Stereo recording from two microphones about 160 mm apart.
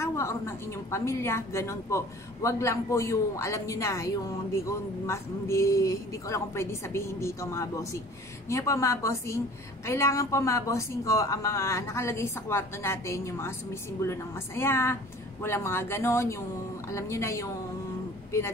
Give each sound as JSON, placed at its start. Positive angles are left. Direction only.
{"t": 0.0, "sound": "a woman's voice", "side_deg": 15}